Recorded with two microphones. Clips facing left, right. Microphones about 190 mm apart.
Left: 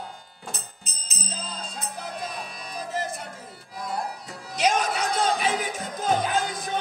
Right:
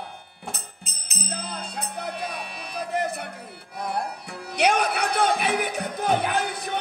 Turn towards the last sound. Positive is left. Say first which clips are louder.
# even
turn(degrees=-65)  # may be behind; listen again after turning